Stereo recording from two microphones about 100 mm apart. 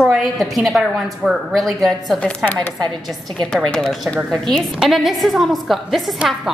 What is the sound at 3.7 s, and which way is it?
A woman's voice, 5° left (ahead or behind).